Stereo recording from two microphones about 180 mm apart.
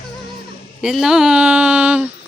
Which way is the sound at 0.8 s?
5° right (ahead or behind).